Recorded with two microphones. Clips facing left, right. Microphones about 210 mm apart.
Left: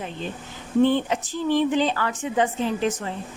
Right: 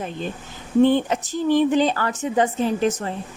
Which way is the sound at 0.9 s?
45° right (ahead or behind).